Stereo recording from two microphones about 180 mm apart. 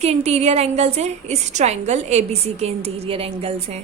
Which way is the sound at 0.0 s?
35° right (ahead or behind).